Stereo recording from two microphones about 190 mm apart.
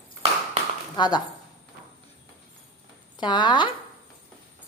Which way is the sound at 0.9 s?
20° left (ahead or behind).